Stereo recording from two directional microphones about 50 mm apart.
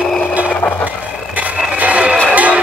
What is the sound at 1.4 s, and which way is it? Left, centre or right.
Music, right.